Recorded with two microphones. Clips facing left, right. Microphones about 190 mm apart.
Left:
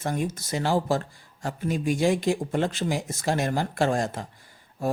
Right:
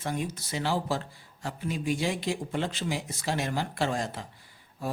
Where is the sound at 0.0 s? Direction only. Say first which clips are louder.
Left 4 dB; 45° left (ahead or behind).